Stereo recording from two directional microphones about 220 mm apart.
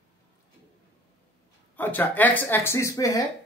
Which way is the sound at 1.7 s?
10° left (ahead or behind).